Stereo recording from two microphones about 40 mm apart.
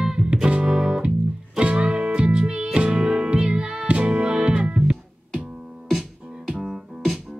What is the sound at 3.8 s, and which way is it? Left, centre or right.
Music, right.